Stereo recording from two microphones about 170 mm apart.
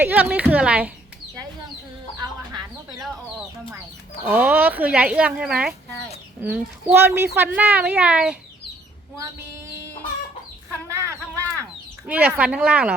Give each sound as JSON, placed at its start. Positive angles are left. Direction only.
{"t": 0.0, "sound": "speech", "side_deg": -10}
{"t": 4.3, "sound": "speech", "side_deg": -10}
{"t": 10.8, "sound": "a sound", "side_deg": -15}
{"t": 12.0, "sound": "speech", "side_deg": -10}